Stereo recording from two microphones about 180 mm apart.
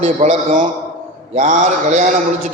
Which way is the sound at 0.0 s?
40° right (ahead or behind).